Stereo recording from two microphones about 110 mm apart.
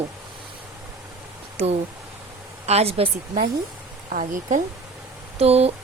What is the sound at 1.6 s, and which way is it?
Speech, 75° right (ahead or behind).